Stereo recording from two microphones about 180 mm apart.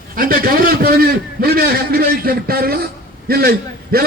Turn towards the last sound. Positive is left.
turn(degrees=-55)  # may be behind; listen again after turning